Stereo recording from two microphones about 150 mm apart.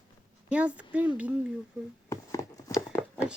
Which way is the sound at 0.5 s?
10° right (ahead or behind).